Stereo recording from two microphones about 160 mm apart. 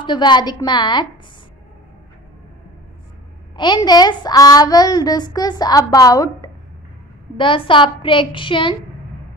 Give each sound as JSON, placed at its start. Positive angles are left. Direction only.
{"t": 0.0, "sound": "speech", "side_deg": 30}
{"t": 3.5, "sound": "a woman's voice", "side_deg": 30}